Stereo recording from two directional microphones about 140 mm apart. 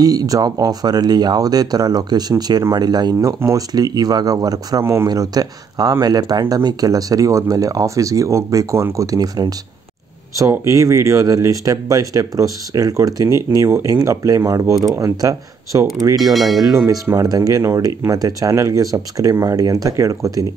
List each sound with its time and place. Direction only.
0.0 s speech: 25° right (ahead or behind)
16.3 s a sound: centre (ahead or behind)
16.6 s speech: 25° right (ahead or behind)